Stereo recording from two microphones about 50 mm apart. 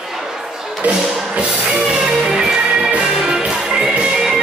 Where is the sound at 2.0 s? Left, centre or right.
Centre.